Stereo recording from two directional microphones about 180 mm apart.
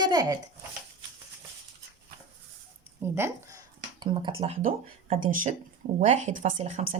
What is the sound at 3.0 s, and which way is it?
Speech, 15° right (ahead or behind).